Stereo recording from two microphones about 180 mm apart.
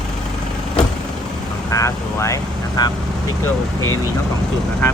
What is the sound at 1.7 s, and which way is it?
Speech, 15° left (ahead or behind).